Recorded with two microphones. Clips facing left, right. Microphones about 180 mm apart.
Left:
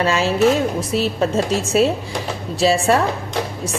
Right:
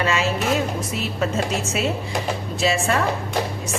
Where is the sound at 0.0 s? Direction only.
35° left (ahead or behind).